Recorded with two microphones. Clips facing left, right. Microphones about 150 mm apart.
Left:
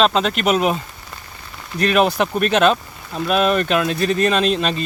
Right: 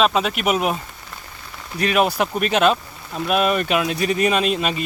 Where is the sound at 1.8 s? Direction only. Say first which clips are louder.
Left 2 dB; 10° right (ahead or behind).